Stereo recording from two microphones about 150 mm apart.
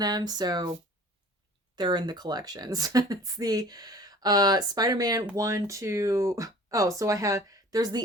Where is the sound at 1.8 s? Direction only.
30° right (ahead or behind).